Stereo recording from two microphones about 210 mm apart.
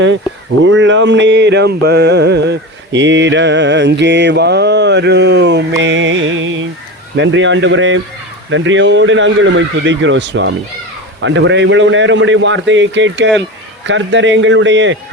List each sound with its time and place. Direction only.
0.6 s mantra: 60° right (ahead or behind)